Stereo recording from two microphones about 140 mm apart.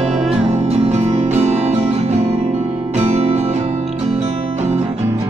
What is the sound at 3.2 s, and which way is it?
Music, 50° right (ahead or behind).